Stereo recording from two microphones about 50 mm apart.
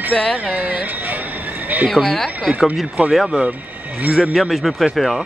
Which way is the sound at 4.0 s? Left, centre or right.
Right.